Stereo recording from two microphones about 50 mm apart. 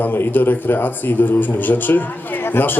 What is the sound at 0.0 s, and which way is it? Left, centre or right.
Speech, left.